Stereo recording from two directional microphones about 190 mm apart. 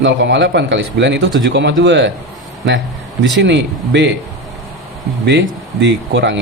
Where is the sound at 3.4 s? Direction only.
70° right (ahead or behind).